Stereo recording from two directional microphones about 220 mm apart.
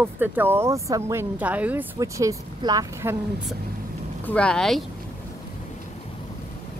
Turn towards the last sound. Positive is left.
turn(degrees=0)  # may be behind; listen again after turning